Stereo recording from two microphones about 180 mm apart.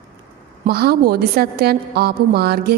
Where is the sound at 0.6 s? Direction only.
60° right (ahead or behind).